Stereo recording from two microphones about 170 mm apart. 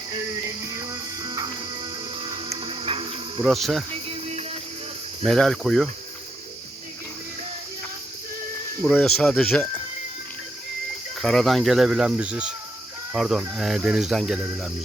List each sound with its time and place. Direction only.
0.4 s music: 20° right (ahead or behind)
3.4 s speech: centre (ahead or behind)
4.1 s music: 40° right (ahead or behind)
5.2 s speech: 5° left (ahead or behind)
9.0 s speech: 5° left (ahead or behind)
11.2 s speech: 5° left (ahead or behind)